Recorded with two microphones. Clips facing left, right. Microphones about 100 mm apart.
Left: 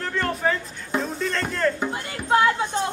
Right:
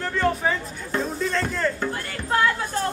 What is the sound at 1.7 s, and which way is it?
Music, 20° left (ahead or behind).